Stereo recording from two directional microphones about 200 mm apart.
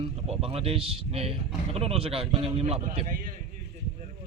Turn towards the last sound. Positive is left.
turn(degrees=-45)  # may be behind; listen again after turning